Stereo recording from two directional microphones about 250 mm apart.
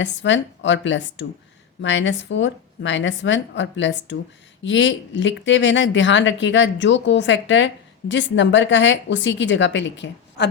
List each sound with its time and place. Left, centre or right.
0.0 s speech: left